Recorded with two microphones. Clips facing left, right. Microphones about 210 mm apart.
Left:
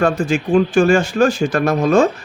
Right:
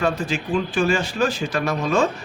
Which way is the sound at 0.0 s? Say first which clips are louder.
Left 6 dB; 50° left (ahead or behind).